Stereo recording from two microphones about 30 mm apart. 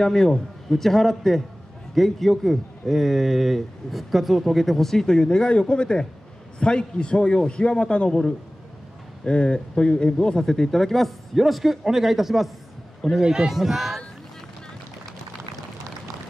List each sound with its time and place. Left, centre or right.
0.0 s a man's voice: centre
0.7 s a man's voice: centre; by 8.1 s left
9.2 s speech: left; by 12.4 s centre
13.2 s a man's voice: right
13.6 s speech: centre